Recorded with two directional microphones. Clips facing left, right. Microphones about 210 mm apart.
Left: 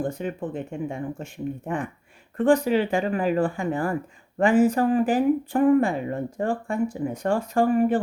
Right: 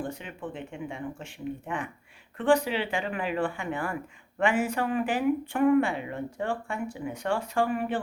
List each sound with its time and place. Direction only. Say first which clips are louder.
0.0 s speech: left 7 dB; 40° left (ahead or behind)